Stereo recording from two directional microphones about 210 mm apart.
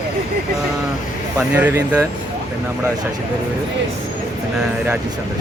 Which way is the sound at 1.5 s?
5° right (ahead or behind).